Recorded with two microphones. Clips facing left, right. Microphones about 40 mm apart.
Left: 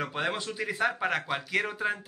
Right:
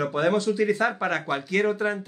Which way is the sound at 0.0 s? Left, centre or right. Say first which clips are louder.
Right 8 dB; centre.